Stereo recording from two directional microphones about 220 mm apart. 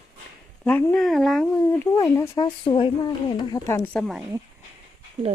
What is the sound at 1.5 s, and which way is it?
Speech, 10° left (ahead or behind).